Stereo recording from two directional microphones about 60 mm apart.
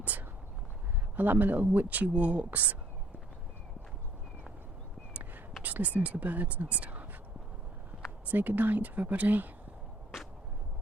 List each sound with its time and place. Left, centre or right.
0.0 s a sound: right
1.1 s speech: right
5.6 s speech: right
8.3 s speech: right